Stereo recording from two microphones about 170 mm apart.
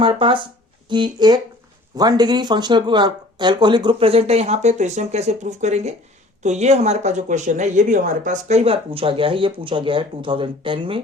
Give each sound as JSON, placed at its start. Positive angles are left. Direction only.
{"t": 0.0, "sound": "speech", "side_deg": -30}